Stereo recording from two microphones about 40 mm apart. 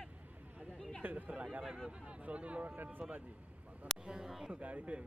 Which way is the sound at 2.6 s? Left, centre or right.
Right.